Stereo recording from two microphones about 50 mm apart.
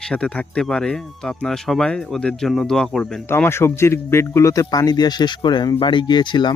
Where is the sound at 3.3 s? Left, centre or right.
Left.